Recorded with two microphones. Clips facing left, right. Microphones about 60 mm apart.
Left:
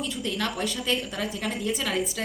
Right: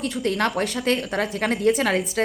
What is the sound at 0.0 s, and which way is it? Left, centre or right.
A woman's voice, right.